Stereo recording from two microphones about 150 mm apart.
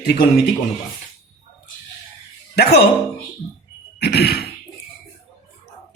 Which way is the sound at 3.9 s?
90° left.